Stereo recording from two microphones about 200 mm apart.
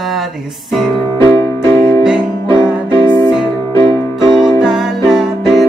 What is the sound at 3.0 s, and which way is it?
Music, 20° right (ahead or behind).